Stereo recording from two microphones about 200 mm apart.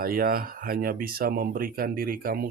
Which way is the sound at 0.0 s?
45° right (ahead or behind).